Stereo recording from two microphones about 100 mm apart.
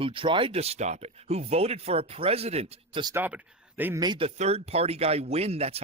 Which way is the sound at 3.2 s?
15° right (ahead or behind).